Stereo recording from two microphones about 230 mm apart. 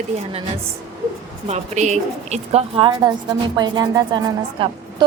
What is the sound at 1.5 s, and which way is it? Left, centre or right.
A woman's voice, right.